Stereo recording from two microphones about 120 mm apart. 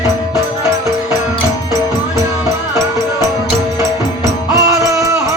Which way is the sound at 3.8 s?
25° right (ahead or behind).